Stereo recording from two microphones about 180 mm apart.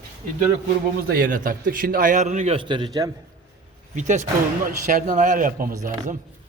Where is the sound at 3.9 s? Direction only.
45° right (ahead or behind).